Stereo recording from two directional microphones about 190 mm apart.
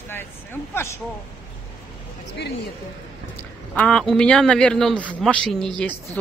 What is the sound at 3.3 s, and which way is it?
Speech, 10° left (ahead or behind).